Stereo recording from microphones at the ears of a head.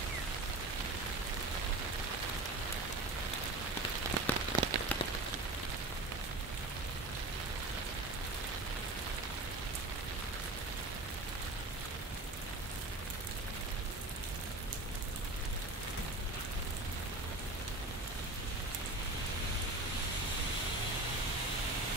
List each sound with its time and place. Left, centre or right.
4.0 s rain on surface: right